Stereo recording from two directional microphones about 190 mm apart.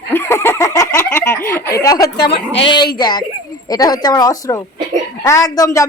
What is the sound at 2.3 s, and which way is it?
Speech, 30° left (ahead or behind).